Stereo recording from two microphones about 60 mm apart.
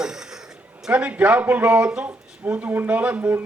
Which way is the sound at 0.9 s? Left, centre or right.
Right.